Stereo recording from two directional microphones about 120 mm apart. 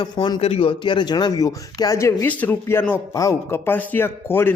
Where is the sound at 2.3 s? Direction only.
15° left (ahead or behind).